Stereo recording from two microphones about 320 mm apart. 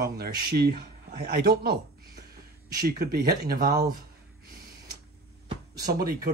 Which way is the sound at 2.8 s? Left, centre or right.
Right.